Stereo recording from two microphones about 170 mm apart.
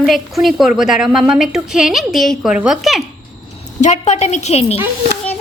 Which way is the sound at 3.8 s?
40° left (ahead or behind).